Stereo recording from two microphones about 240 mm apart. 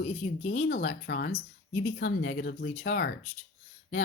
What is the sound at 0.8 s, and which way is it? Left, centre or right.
Speech, left.